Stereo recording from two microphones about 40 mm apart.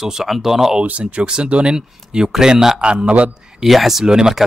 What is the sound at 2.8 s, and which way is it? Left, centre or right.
Speech, right.